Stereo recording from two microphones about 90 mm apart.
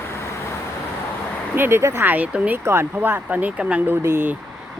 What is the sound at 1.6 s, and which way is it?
Speech, 25° right (ahead or behind).